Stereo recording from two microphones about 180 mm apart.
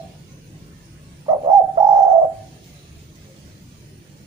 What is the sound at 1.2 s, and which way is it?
Bird, 20° right (ahead or behind).